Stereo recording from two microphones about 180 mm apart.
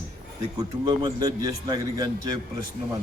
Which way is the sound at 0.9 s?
20° right (ahead or behind).